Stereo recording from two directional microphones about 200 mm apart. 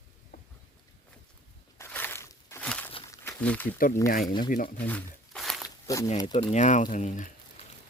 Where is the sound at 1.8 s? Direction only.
10° left (ahead or behind).